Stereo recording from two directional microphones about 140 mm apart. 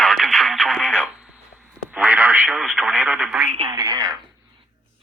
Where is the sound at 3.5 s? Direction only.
40° right (ahead or behind).